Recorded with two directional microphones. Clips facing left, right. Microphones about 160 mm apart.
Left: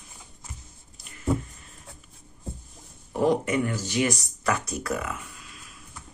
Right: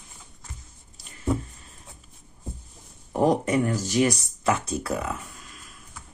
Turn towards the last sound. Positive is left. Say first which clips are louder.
# right 1 dB
turn(degrees=-30)  # may be behind; listen again after turning